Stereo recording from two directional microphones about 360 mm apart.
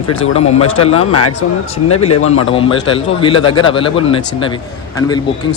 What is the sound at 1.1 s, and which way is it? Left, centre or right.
Speech, left.